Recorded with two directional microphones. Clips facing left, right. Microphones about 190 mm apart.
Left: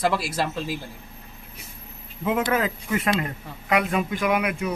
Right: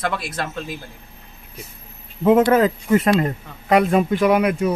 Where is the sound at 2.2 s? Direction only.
40° right (ahead or behind).